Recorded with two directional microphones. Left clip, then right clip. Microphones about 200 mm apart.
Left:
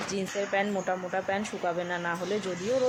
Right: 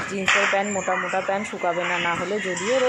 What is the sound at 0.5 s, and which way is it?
Speech, 5° right (ahead or behind).